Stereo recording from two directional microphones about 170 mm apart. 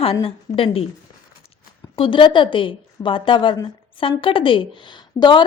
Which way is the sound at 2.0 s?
30° left (ahead or behind).